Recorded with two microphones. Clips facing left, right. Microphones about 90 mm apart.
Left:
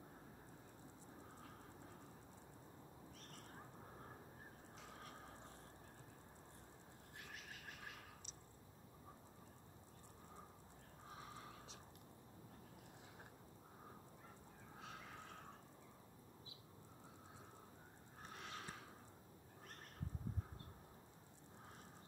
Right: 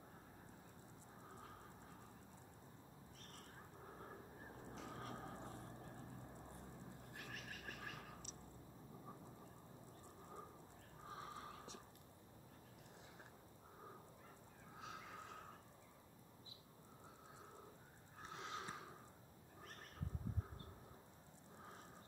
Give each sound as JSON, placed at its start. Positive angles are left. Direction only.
{"t": 18.3, "sound": "snort", "side_deg": -20}